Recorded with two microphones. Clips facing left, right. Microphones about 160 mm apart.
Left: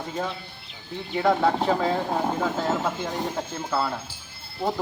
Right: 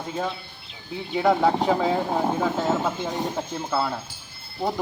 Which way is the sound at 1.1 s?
5° right (ahead or behind).